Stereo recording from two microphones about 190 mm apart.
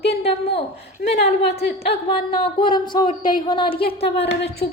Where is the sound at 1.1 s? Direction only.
60° left (ahead or behind).